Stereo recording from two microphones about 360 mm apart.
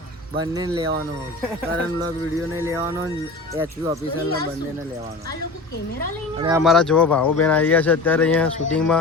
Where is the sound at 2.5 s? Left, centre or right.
Centre.